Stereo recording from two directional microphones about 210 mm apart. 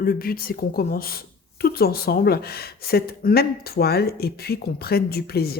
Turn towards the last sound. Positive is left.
turn(degrees=45)  # may be behind; listen again after turning